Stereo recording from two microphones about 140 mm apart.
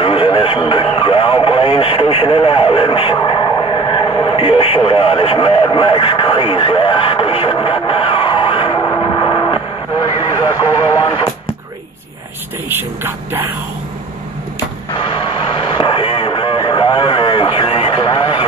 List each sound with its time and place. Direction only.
0.0 s radio: 40° left (ahead or behind)
12.6 s speech: 15° right (ahead or behind)
14.9 s radio: 35° left (ahead or behind)